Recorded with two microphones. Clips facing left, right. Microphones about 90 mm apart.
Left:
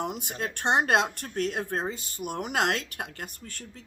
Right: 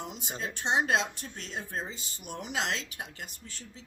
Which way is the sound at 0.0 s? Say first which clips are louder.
Left 6 dB; 55° left (ahead or behind).